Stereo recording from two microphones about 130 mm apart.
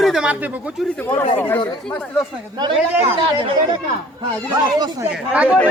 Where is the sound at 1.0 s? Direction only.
15° left (ahead or behind).